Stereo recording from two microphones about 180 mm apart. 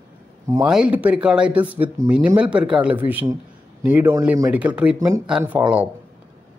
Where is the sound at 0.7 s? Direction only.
5° right (ahead or behind).